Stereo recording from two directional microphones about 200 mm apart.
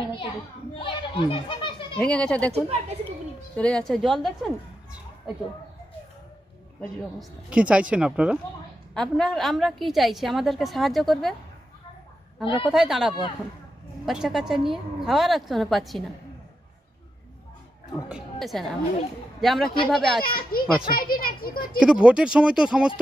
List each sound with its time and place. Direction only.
0.7 s a child's voice: 25° left (ahead or behind)
2.0 s a woman's voice: 5° left (ahead or behind)
2.5 s speech: 30° right (ahead or behind)
3.5 s a woman's voice: 5° left (ahead or behind)
6.8 s a woman's voice: centre (ahead or behind)
12.6 s a woman's voice: 5° right (ahead or behind)
18.0 s a woman's voice: 5° right (ahead or behind)
20.2 s a child's voice: 45° left (ahead or behind)
21.7 s a woman's voice: 5° right (ahead or behind)